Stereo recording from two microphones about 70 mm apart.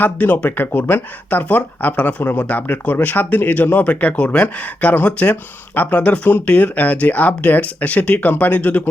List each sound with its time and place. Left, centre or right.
0.0 s speech: left